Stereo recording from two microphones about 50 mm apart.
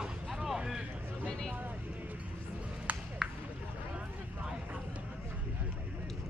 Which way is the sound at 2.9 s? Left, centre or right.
Right.